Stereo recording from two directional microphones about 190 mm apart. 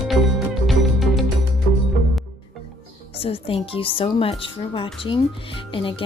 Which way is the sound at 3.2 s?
30° left (ahead or behind).